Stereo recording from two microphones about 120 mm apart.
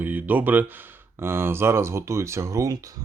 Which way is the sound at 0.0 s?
15° right (ahead or behind).